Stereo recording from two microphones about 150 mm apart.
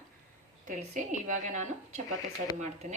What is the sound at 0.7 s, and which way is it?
Speech, 55° right (ahead or behind).